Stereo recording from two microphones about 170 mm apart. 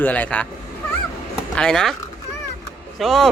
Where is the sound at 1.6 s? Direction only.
5° left (ahead or behind).